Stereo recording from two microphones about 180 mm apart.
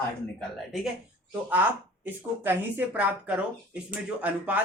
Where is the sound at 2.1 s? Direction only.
10° right (ahead or behind).